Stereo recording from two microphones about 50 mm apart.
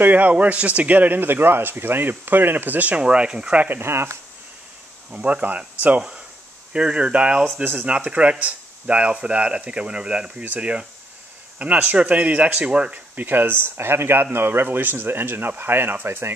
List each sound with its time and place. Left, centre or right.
0.0 s a man's voice: right
3.0 s speech: right
3.5 s a man's voice: right
3.8 s speech: right
5.1 s speech: right
6.7 s speech: centre
13.1 s speech: right